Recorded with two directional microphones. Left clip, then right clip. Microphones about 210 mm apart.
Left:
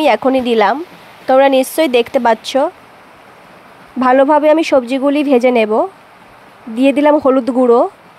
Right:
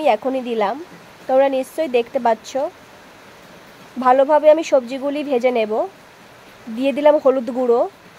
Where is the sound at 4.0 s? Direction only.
15° left (ahead or behind).